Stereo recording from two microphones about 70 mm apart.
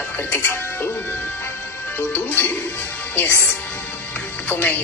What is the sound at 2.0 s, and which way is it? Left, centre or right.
Speech, left.